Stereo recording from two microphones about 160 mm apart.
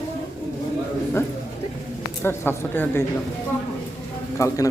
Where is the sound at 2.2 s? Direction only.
15° left (ahead or behind).